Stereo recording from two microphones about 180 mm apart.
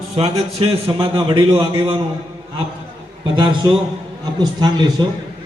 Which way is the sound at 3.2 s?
25° right (ahead or behind).